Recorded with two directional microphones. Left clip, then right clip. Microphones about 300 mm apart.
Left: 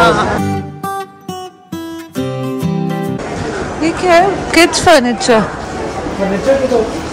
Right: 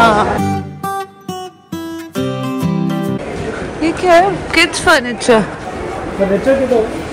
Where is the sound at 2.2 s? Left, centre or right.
Centre.